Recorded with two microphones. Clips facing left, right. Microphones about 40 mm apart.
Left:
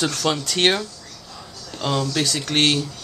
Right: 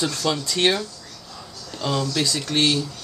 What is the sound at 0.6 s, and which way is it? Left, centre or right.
Speech, left.